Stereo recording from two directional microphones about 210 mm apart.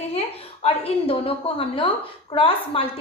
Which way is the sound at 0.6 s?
25° left (ahead or behind).